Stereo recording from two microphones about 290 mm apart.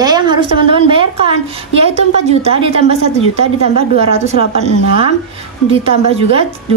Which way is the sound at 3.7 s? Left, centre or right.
Left.